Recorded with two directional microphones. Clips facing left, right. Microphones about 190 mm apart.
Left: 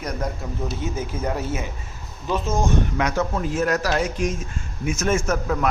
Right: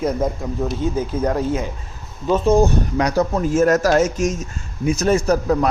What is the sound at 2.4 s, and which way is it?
Speech, 65° right (ahead or behind).